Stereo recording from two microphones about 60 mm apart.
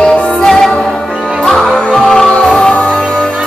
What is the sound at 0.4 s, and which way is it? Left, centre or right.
Music, centre.